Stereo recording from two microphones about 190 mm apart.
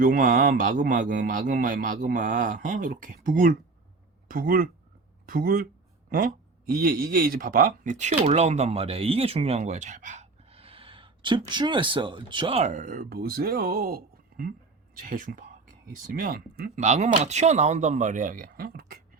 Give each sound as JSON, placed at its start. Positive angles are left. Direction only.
{"t": 0.0, "sound": "a man's voice", "side_deg": -45}
{"t": 16.8, "sound": "speech", "side_deg": -35}